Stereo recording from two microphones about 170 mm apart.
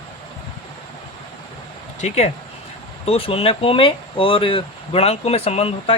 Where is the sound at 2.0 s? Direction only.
40° left (ahead or behind).